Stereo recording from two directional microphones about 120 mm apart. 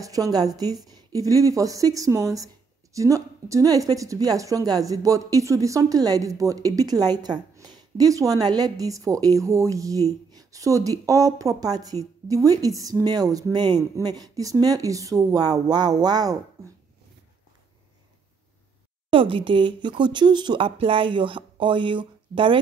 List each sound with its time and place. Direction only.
0.0 s speech: 30° right (ahead or behind)
19.0 s speech: 45° right (ahead or behind)